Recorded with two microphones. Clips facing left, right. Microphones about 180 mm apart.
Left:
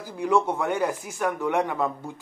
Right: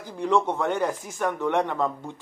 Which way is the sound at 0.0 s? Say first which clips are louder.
Even; 10° left (ahead or behind).